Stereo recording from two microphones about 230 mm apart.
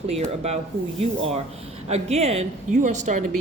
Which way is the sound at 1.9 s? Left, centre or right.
Right.